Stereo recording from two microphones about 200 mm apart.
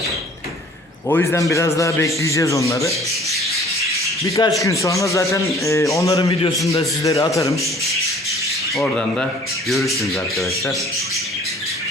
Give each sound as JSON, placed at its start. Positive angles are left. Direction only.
{"t": 1.0, "sound": "a man's voice", "side_deg": 10}
{"t": 4.2, "sound": "a man's voice", "side_deg": 15}
{"t": 8.7, "sound": "speech", "side_deg": 0}